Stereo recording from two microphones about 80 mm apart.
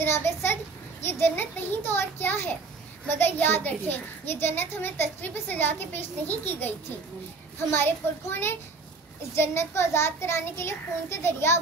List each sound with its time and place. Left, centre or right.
0.0 s a child's voice: left
7.7 s a child's voice: left